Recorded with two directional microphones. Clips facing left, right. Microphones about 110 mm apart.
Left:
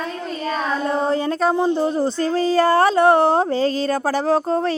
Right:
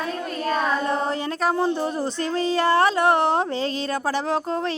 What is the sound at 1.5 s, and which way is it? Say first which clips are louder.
Speech: left 4 dB; 20° left (ahead or behind).